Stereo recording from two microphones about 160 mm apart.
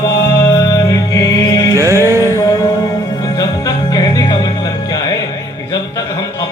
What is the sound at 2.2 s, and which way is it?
Music, 20° left (ahead or behind).